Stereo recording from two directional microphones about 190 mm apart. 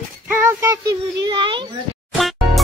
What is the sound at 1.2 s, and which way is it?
Speech, 25° right (ahead or behind).